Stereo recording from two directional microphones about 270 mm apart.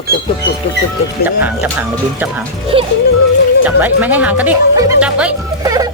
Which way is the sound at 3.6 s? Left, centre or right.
Centre.